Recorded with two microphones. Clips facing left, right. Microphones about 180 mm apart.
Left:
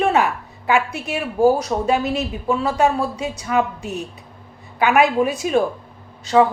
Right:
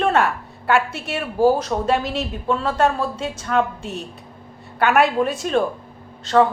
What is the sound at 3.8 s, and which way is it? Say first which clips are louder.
Speech: left 3 dB; 65° left (ahead or behind).